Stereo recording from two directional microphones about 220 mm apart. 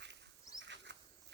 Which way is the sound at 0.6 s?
55° right (ahead or behind).